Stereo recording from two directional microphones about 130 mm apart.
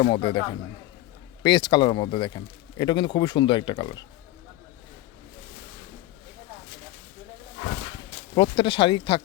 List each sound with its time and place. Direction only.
0.0 s speech: 40° left (ahead or behind)
8.4 s speech: 40° left (ahead or behind)